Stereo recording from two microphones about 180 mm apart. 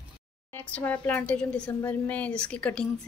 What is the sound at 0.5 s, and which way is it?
A woman's voice, 10° left (ahead or behind).